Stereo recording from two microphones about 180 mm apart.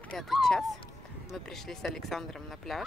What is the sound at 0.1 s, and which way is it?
Speech, centre (ahead or behind).